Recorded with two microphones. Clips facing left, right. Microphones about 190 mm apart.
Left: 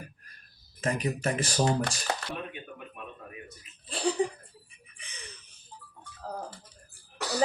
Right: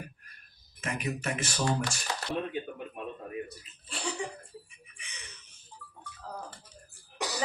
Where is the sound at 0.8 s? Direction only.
35° left (ahead or behind).